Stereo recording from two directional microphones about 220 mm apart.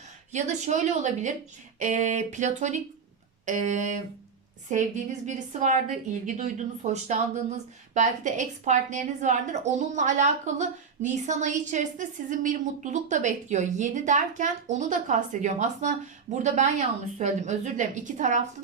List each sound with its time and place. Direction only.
0.3 s a woman's voice: 30° right (ahead or behind)